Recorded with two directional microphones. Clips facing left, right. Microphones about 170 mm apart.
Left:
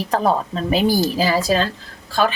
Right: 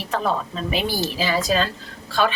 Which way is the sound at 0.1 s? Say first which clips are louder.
Left 4 dB; 40° left (ahead or behind).